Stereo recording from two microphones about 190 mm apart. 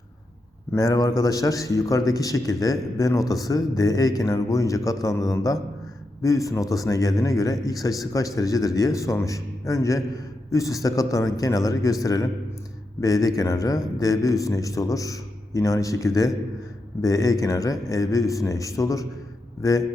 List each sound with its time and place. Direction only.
0.7 s a man's voice: 15° left (ahead or behind)